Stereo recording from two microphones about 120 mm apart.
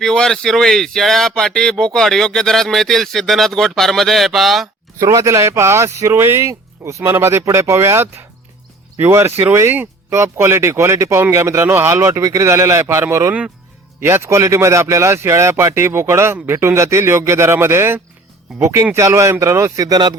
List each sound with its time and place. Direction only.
0.0 s speech: 5° left (ahead or behind)
4.9 s speech: 30° right (ahead or behind)